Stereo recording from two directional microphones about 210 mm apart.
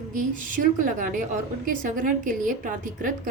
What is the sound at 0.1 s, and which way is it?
A woman's voice, 40° right (ahead or behind).